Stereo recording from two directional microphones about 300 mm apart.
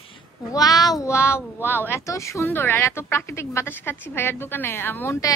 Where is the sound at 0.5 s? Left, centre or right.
Centre.